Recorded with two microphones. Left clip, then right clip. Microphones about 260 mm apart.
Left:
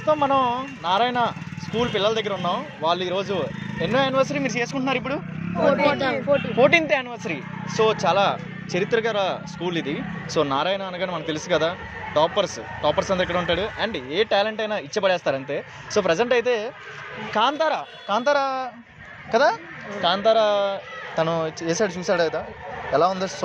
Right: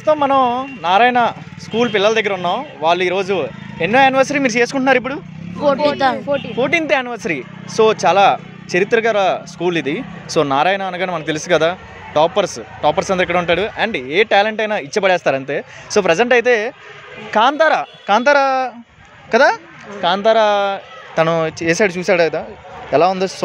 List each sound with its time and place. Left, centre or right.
0.0 s speech: right